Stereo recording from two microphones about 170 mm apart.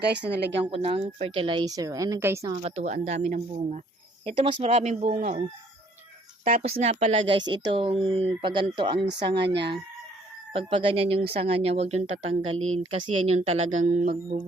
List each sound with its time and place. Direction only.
0.0 s a woman's voice: 80° right
0.7 s a woman's voice: 35° right (ahead or behind); by 2.5 s 15° right (ahead or behind)
2.6 s speech: 40° right (ahead or behind)
4.3 s speech: 35° right (ahead or behind)
6.4 s speech: 50° right (ahead or behind)
6.7 s speech: 40° right (ahead or behind)
9.3 s a woman's voice: 80° right
10.5 s speech: 35° right (ahead or behind)